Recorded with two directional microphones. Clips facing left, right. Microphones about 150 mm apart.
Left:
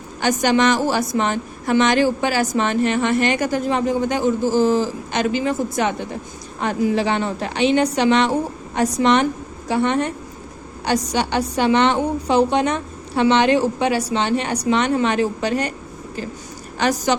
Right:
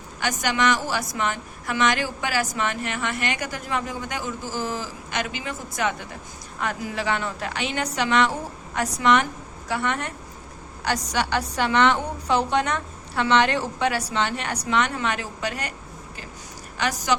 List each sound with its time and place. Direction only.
0.2 s a woman's voice: 30° left (ahead or behind)
16.7 s a woman's voice: 30° left (ahead or behind)